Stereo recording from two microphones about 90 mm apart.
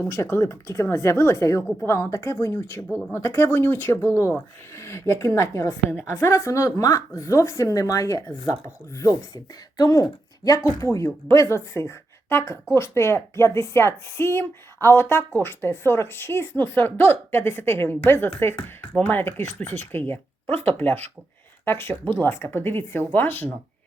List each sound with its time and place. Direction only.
0.0 s a woman's voice: 30° left (ahead or behind)